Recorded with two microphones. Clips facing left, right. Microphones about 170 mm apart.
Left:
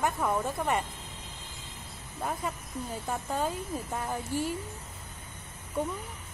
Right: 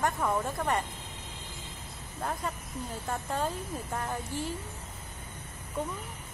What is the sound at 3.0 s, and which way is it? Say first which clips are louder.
A woman's voice: left 1 dB; 5° left (ahead or behind).